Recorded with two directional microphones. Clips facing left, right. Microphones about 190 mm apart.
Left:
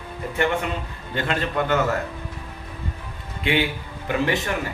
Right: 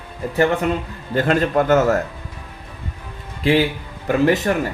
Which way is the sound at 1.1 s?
45° right (ahead or behind).